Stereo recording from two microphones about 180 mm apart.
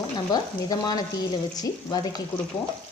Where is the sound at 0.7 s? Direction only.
20° left (ahead or behind).